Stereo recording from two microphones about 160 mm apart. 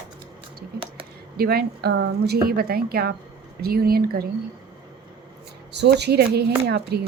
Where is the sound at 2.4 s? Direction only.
70° right (ahead or behind).